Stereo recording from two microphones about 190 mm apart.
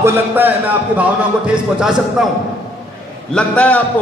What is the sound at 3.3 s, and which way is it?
Speech, 5° left (ahead or behind).